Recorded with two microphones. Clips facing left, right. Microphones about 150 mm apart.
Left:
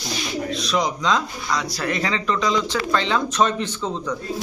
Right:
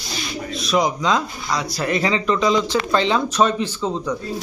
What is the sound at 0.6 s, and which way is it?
Speech, 5° right (ahead or behind).